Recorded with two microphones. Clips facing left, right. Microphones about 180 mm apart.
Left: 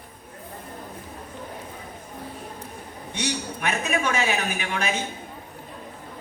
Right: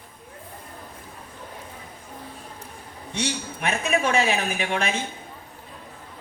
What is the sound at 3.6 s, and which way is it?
A woman's voice, 30° right (ahead or behind).